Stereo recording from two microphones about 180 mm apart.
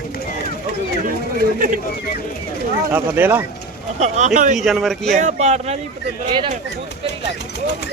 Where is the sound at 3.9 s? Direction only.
40° right (ahead or behind).